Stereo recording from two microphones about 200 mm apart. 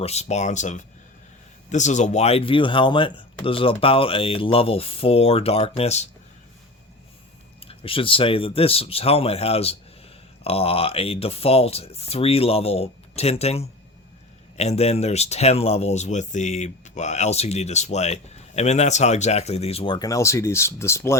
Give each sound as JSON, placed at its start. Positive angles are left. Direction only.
{"t": 0.0, "sound": "speech", "side_deg": 35}
{"t": 7.6, "sound": "speech", "side_deg": 30}